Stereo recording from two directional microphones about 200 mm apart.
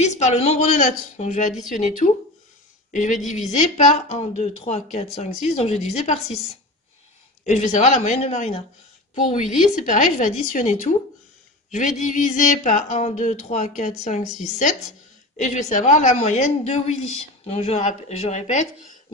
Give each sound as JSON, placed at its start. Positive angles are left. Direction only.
{"t": 0.0, "sound": "a woman's voice", "side_deg": 35}
{"t": 12.0, "sound": "a woman's voice", "side_deg": 40}